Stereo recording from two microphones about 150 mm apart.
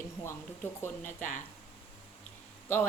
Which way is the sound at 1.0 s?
60° left (ahead or behind).